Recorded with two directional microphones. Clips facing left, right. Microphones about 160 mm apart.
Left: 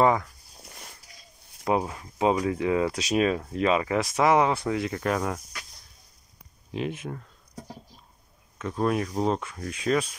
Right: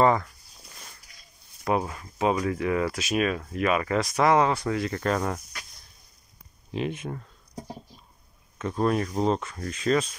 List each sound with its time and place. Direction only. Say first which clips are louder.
0.0 s speech: even; 10° left (ahead or behind)
1.6 s speech: left 1 dB; 15° left (ahead or behind)
6.7 s speech: right 1 dB; 5° left (ahead or behind)
8.5 s speech: right 1 dB; centre (ahead or behind)